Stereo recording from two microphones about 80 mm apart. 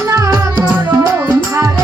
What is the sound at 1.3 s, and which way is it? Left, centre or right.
Music, right.